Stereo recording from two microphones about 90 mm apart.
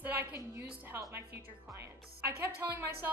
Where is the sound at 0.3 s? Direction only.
30° right (ahead or behind).